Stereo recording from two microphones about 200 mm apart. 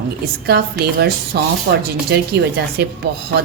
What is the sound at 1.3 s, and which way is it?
A woman's voice, 55° right (ahead or behind).